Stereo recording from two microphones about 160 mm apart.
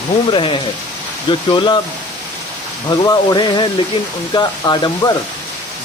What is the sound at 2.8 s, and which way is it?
Speech, 25° left (ahead or behind).